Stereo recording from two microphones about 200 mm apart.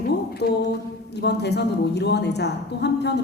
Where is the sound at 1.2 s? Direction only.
55° left (ahead or behind).